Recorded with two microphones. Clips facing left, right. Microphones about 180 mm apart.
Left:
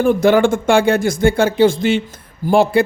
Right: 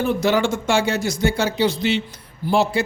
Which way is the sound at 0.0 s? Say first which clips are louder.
Left 7 dB; 50° left (ahead or behind).